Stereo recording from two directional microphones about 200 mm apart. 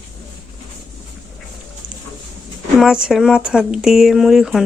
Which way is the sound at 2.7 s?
5° right (ahead or behind).